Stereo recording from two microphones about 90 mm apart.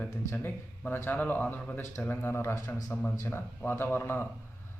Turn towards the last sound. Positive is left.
turn(degrees=25)  # may be behind; listen again after turning